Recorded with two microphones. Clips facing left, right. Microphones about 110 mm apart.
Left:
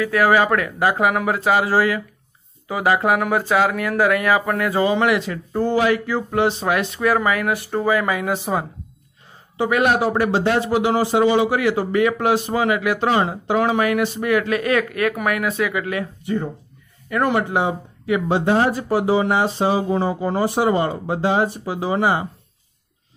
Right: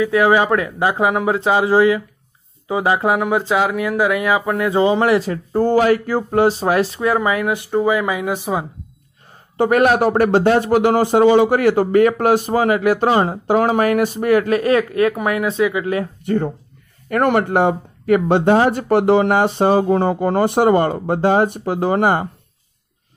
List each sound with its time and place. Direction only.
0.0 s speech: 20° right (ahead or behind)
9.6 s speech: 45° right (ahead or behind); by 16.1 s 30° right (ahead or behind)
17.1 s speech: 55° right (ahead or behind)